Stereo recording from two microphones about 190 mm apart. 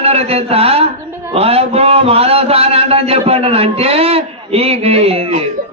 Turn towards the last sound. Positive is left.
turn(degrees=-30)  # may be behind; listen again after turning